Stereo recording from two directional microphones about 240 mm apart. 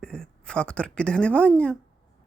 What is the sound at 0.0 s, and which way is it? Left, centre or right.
Speech, centre.